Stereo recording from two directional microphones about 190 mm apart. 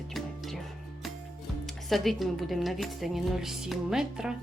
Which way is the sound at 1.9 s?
Centre (ahead or behind).